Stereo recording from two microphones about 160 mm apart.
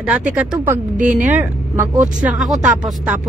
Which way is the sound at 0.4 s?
10° right (ahead or behind).